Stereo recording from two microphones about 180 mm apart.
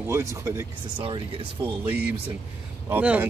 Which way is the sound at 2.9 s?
10° right (ahead or behind).